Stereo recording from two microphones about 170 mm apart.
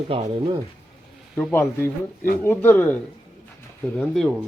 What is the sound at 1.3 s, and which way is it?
Speech, 10° left (ahead or behind).